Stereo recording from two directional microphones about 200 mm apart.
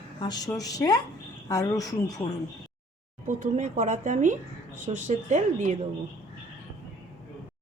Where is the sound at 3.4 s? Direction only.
40° right (ahead or behind).